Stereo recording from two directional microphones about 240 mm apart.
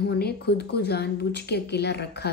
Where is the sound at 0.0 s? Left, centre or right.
Left.